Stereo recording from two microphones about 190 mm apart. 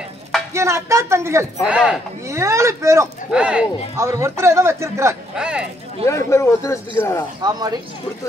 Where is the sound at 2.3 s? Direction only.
15° right (ahead or behind).